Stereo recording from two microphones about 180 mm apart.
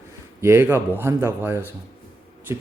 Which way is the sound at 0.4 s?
15° right (ahead or behind).